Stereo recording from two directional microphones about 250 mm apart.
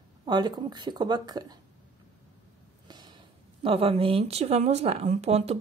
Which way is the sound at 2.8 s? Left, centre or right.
Centre.